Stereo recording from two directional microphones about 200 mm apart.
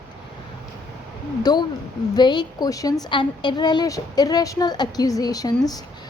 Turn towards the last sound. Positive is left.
turn(degrees=20)  # may be behind; listen again after turning